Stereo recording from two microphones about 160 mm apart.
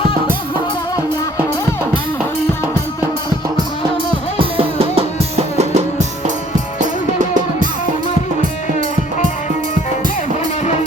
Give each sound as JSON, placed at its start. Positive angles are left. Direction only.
{"t": 4.4, "sound": "music", "side_deg": -35}